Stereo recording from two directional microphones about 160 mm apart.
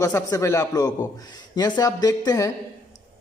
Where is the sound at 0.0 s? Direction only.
20° left (ahead or behind).